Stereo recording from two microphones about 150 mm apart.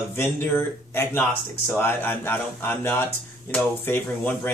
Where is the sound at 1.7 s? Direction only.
15° left (ahead or behind).